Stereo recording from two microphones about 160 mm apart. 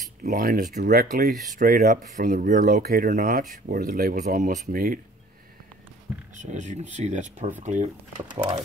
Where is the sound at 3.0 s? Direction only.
55° right (ahead or behind).